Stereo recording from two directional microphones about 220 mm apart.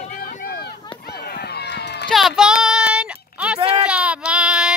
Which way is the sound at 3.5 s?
25° right (ahead or behind).